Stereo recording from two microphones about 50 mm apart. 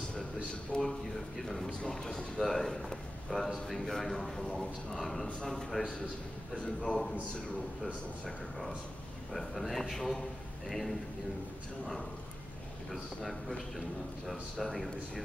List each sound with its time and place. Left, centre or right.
0.7 s speech: centre
1.4 s a man's voice: centre
6.8 s a man's voice: centre
9.3 s a man's voice: centre
12.9 s a man's voice: centre